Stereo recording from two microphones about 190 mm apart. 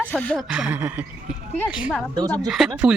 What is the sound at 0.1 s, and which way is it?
Speech, 5° left (ahead or behind).